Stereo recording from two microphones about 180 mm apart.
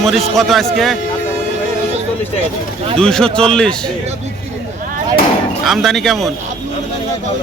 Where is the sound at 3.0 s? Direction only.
5° left (ahead or behind).